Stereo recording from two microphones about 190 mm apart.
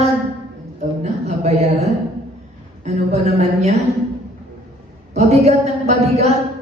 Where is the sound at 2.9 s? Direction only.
35° right (ahead or behind).